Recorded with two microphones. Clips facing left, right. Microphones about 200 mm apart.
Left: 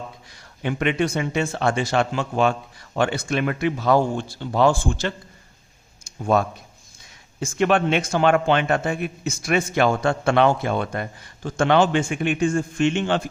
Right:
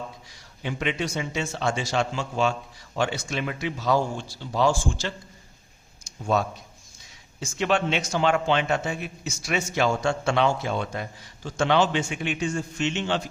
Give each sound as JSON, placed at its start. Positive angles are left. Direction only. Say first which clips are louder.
{"t": 0.3, "sound": "a man's voice", "louder": "left 8 dB", "side_deg": 55}
{"t": 6.1, "sound": "a sound", "louder": "left 4 dB", "side_deg": 55}
{"t": 7.3, "sound": "a man's voice", "louder": "left 5 dB", "side_deg": 55}